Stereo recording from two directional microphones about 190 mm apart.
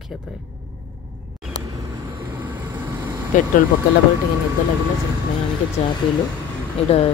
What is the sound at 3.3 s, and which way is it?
Speech, 45° left (ahead or behind).